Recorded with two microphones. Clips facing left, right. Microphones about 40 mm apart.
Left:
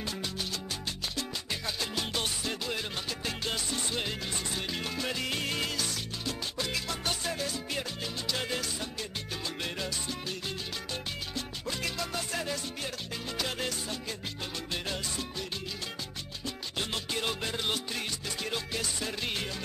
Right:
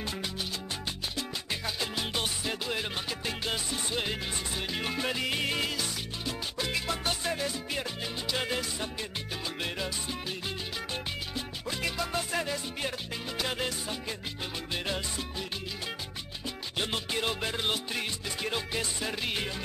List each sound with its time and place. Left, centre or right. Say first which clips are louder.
0.0 s music: right 1 dB; centre
1.1 s salsa music: right 1 dB; centre
4.8 s music: right 5 dB; centre
9.6 s salsa music: right 2 dB; centre
11.3 s music: right 1 dB; centre
14.7 s salsa music: right 3 dB; centre
16.4 s music: right 2 dB; centre